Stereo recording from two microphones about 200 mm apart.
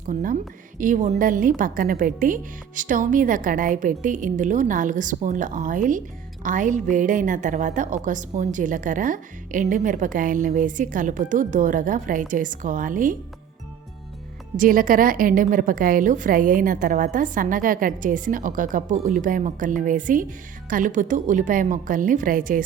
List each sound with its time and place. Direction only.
0.0 s a woman's voice: 40° right (ahead or behind)
14.5 s a woman's voice: 45° right (ahead or behind)